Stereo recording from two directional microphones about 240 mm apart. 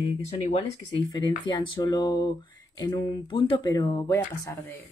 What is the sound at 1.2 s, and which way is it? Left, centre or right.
Speech, centre.